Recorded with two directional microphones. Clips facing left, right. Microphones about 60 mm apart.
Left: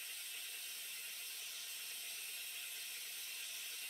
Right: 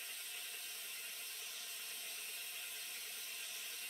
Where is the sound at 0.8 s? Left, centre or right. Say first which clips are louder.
Right 1 dB; centre.